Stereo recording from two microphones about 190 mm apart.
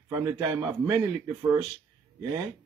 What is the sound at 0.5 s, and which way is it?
Speech, 15° right (ahead or behind).